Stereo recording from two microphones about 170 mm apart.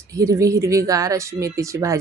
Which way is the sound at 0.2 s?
20° right (ahead or behind).